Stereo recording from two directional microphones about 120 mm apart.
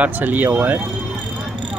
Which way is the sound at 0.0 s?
15° right (ahead or behind).